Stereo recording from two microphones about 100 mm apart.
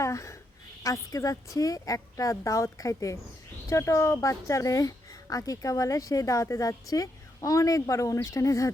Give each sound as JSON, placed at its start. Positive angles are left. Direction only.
{"t": 0.0, "sound": "speech", "side_deg": 30}